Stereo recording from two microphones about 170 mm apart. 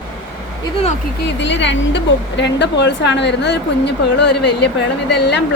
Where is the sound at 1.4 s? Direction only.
90° left.